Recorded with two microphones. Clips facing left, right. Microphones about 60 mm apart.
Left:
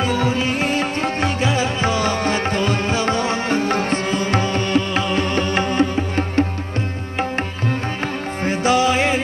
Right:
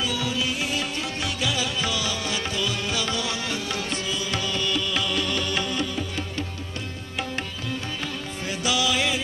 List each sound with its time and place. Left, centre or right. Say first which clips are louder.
0.0 s music: left 8 dB; left
8.5 s music: left 9 dB; left